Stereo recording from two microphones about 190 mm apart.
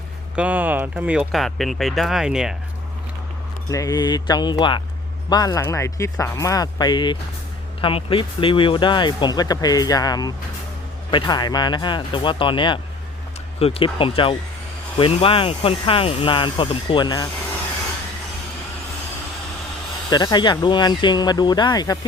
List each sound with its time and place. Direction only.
0.3 s speech: 10° right (ahead or behind)
3.7 s speech: 20° left (ahead or behind)
20.1 s speech: 20° left (ahead or behind)